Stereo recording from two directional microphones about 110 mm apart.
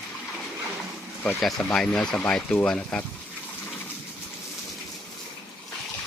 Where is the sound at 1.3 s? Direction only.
Centre (ahead or behind).